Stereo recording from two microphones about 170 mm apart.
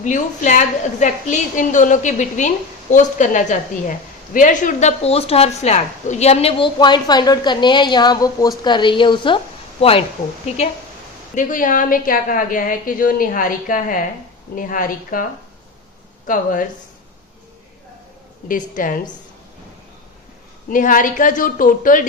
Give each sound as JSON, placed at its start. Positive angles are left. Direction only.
{"t": 0.0, "sound": "a woman's voice", "side_deg": 45}
{"t": 10.5, "sound": "a woman's voice", "side_deg": 40}
{"t": 11.3, "sound": "a woman's voice", "side_deg": 50}
{"t": 18.4, "sound": "a woman's voice", "side_deg": 50}
{"t": 20.7, "sound": "a woman's voice", "side_deg": 50}